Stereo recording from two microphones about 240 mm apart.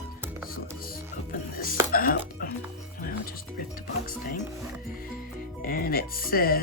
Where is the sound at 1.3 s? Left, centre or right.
Left.